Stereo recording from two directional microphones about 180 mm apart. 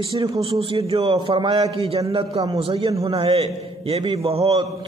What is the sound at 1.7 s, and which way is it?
Speech, 35° right (ahead or behind).